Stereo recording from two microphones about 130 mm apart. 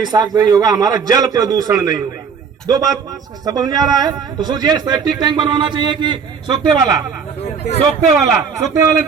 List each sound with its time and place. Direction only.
0.0 s a man's voice: 30° right (ahead or behind)
8.2 s a man's voice: 25° right (ahead or behind)